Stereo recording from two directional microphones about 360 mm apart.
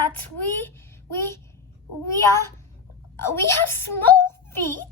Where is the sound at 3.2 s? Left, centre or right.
Centre.